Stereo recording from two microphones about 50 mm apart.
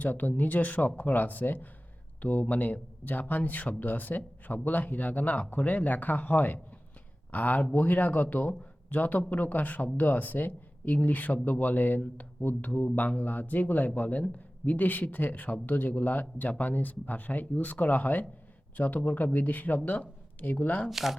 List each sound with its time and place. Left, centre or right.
0.0 s speech: left
20.9 s speech: centre